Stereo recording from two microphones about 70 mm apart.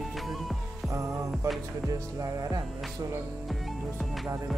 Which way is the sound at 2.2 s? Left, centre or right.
Right.